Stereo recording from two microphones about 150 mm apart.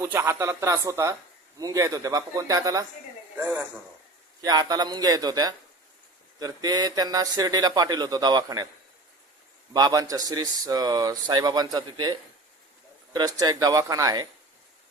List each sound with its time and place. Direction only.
0.0 s speech: 15° right (ahead or behind)
3.3 s speech: 10° right (ahead or behind)
4.4 s speech: 25° right (ahead or behind)
9.7 s speech: 25° right (ahead or behind)